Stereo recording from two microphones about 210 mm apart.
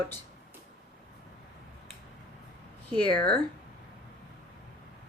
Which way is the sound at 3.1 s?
50° right (ahead or behind).